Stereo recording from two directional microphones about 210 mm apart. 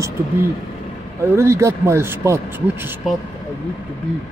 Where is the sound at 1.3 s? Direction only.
10° right (ahead or behind).